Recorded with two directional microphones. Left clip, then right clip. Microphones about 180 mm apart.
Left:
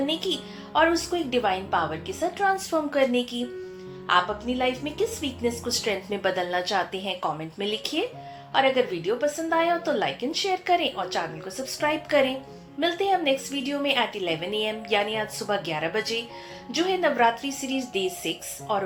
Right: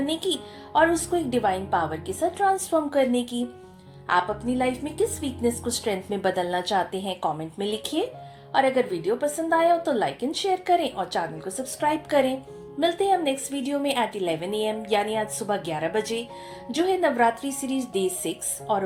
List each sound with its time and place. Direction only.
0.0 s a woman's voice: 50° right (ahead or behind)